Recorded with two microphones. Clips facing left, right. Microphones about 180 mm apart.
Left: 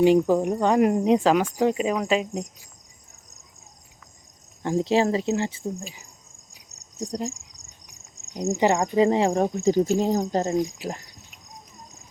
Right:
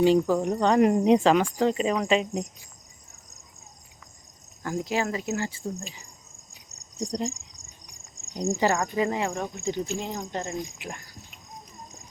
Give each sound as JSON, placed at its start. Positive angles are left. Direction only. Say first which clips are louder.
{"t": 0.0, "sound": "speech", "louder": "left 3 dB", "side_deg": 15}
{"t": 4.6, "sound": "speech", "louder": "left 7 dB", "side_deg": 30}
{"t": 5.8, "sound": "cricket", "louder": "left 2 dB", "side_deg": 5}
{"t": 8.4, "sound": "speech", "louder": "left 3 dB", "side_deg": 20}
{"t": 9.0, "sound": "cricket", "louder": "left 8 dB", "side_deg": 30}
{"t": 10.9, "sound": "cricket", "louder": "left 3 dB", "side_deg": 25}